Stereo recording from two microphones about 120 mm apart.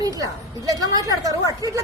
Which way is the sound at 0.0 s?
30° right (ahead or behind).